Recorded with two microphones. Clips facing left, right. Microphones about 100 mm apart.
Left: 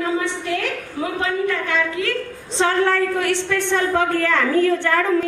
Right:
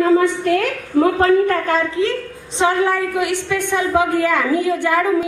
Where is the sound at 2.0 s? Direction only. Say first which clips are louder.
Right 4 dB; 20° right (ahead or behind).